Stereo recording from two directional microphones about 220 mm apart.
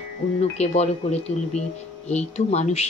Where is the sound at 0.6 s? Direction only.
30° left (ahead or behind).